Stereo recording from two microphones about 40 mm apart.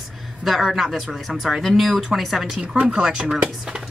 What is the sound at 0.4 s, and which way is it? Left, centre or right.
Speech, centre.